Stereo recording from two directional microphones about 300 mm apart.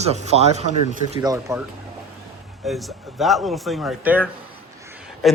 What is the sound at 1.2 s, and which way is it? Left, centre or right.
Speech, centre.